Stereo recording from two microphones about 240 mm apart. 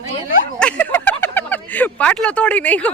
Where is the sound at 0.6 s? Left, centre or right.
Centre.